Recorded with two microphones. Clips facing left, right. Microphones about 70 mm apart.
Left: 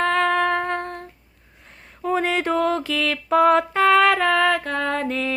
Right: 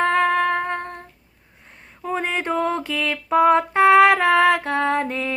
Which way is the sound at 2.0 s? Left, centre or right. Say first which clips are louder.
Left 3 dB; centre.